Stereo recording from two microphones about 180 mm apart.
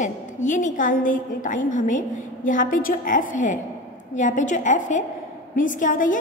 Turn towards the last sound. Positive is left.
turn(degrees=45)  # may be behind; listen again after turning